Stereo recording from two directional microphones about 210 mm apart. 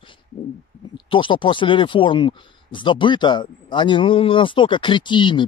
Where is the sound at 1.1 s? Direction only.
25° left (ahead or behind).